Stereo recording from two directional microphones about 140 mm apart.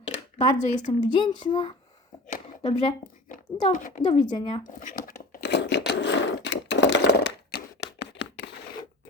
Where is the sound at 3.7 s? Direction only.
65° left (ahead or behind).